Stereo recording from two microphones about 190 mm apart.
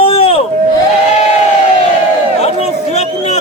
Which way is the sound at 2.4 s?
35° left (ahead or behind).